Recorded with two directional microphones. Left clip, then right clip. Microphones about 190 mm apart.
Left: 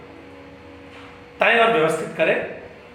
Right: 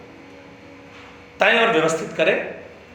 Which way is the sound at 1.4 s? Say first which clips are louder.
Even; 40° right (ahead or behind).